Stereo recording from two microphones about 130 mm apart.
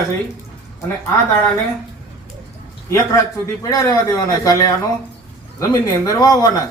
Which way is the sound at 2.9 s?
25° left (ahead or behind).